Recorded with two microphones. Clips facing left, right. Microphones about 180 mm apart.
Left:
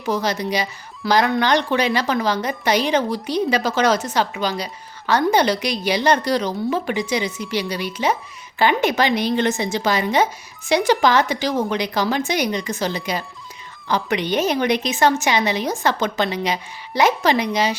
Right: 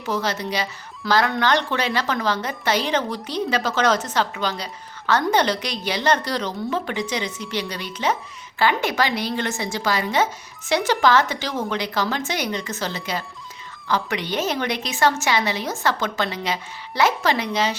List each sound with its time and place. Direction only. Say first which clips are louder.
0.0 s a woman's voice: left 3 dB; 15° left (ahead or behind)